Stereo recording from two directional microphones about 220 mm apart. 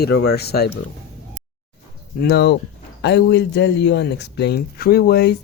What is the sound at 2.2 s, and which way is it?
Speech, 50° left (ahead or behind).